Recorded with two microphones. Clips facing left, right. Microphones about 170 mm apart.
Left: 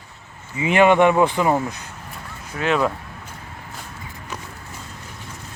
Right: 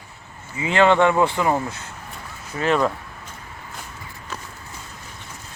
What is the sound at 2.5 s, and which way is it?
Speech, 5° left (ahead or behind).